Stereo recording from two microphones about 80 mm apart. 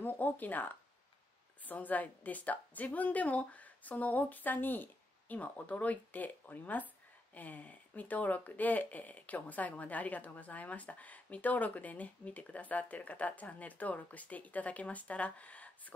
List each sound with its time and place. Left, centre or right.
0.0 s speech: left